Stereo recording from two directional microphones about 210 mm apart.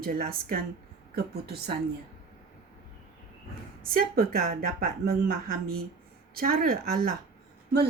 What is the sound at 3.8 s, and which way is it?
A woman's voice, 45° right (ahead or behind).